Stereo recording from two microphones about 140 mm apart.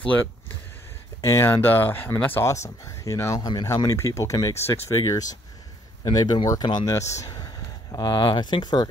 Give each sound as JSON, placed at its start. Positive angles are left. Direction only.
{"t": 1.2, "sound": "speech", "side_deg": 20}